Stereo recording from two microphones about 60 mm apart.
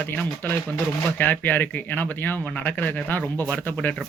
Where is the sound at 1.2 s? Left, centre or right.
Left.